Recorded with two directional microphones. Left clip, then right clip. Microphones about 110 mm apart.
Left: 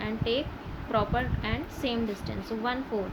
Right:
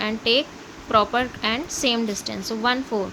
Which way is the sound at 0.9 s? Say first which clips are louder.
Right 9 dB; 60° right (ahead or behind).